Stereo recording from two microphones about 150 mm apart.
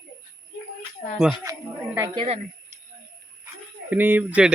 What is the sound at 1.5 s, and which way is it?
Speech, 25° right (ahead or behind).